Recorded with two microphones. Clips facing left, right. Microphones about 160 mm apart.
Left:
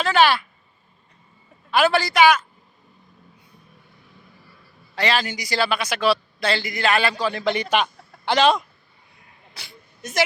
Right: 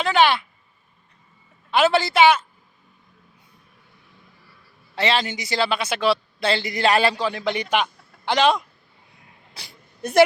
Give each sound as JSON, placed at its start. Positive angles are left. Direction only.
{"t": 0.0, "sound": "speech", "side_deg": -20}
{"t": 1.7, "sound": "a man's voice", "side_deg": -25}
{"t": 4.9, "sound": "a man's voice", "side_deg": -25}
{"t": 7.2, "sound": "a man's voice", "side_deg": -15}
{"t": 9.6, "sound": "a sound", "side_deg": -30}